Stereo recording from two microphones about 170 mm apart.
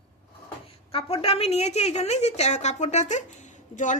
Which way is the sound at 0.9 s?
35° left (ahead or behind).